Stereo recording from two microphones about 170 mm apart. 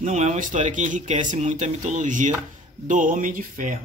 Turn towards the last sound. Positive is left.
turn(degrees=-50)  # may be behind; listen again after turning